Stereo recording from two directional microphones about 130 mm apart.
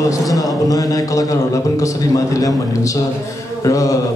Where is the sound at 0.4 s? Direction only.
30° left (ahead or behind).